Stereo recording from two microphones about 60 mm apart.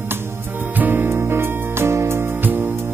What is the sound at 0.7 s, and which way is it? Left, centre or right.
Music, right.